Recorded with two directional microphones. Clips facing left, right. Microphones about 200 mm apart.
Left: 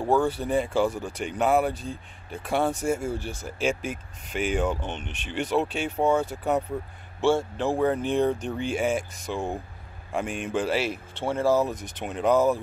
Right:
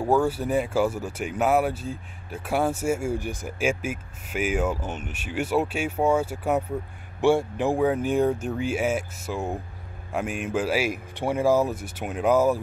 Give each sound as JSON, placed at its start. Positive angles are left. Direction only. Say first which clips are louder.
{"t": 0.0, "sound": "speech", "louder": "right 1 dB", "side_deg": -10}